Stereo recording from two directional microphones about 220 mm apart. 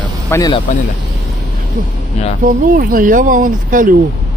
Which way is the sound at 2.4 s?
40° right (ahead or behind).